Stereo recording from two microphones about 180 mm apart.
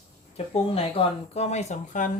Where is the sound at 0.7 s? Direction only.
35° left (ahead or behind).